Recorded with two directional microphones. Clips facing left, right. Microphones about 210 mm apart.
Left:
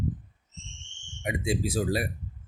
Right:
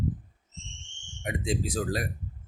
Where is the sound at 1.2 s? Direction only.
10° left (ahead or behind).